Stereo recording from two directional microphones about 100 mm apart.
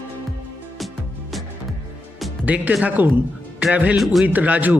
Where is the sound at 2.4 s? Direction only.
10° right (ahead or behind).